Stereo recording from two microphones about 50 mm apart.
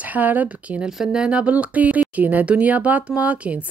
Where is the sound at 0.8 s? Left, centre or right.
Centre.